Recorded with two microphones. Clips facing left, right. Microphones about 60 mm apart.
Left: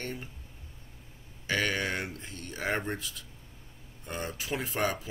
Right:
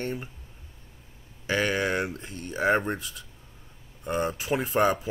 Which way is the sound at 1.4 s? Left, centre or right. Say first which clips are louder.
Right 4 dB; right.